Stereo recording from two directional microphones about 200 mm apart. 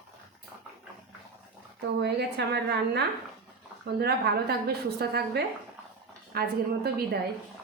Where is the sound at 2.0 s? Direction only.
55° right (ahead or behind).